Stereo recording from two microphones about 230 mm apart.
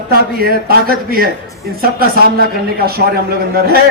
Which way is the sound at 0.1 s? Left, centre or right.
Right.